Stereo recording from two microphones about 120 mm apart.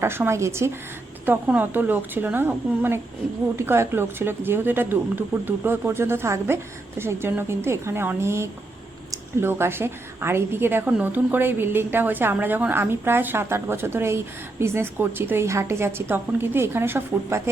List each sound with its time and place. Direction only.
0.0 s a woman's voice: 20° right (ahead or behind)